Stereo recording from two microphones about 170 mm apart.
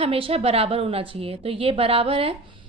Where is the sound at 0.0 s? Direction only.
35° right (ahead or behind).